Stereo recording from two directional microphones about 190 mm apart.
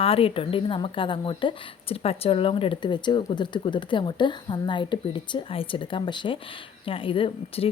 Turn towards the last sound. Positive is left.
turn(degrees=30)  # may be behind; listen again after turning